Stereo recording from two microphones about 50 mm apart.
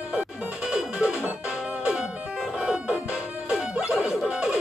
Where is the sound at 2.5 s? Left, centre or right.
Centre.